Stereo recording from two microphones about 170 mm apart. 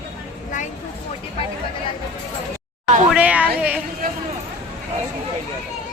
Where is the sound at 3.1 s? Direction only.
5° right (ahead or behind).